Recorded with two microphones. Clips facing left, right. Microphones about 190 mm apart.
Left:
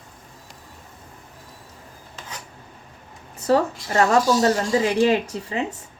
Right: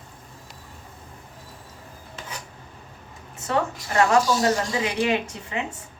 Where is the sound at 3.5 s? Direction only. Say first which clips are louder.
Left 5 dB; 35° left (ahead or behind).